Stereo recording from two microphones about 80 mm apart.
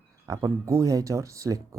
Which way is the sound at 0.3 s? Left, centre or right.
Right.